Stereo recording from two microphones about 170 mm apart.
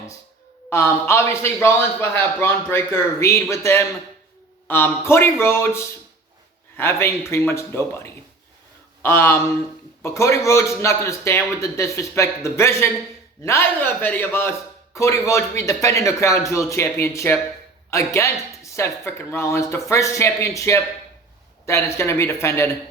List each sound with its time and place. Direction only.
0.7 s a man's voice: 15° left (ahead or behind)